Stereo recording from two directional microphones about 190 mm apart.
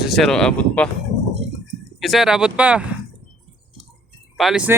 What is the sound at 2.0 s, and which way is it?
Speech, centre (ahead or behind).